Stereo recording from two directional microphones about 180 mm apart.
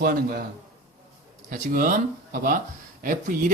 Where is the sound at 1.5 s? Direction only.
50° right (ahead or behind).